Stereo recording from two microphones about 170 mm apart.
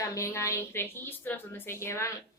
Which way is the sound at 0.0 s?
20° left (ahead or behind).